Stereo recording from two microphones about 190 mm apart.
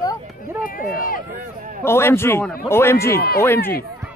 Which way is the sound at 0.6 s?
45° left (ahead or behind).